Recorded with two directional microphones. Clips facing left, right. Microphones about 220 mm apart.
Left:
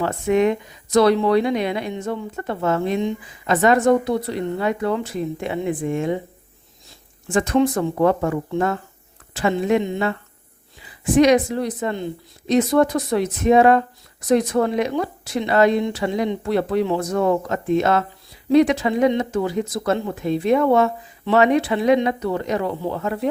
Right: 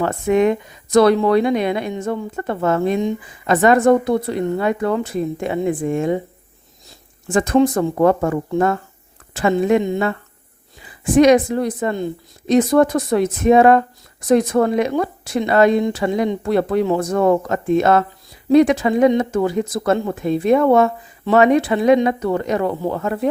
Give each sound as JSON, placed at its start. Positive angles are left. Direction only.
{"t": 0.0, "sound": "speech", "side_deg": -50}
{"t": 7.3, "sound": "speech", "side_deg": -45}
{"t": 11.2, "sound": "speech", "side_deg": -50}